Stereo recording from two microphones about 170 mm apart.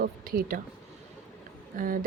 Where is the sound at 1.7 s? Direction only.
55° right (ahead or behind).